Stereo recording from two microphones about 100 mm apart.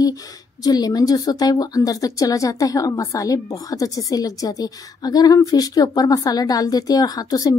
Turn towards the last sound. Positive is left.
turn(degrees=40)  # may be behind; listen again after turning